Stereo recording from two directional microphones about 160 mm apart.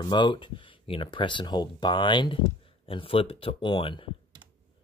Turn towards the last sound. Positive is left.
turn(degrees=35)  # may be behind; listen again after turning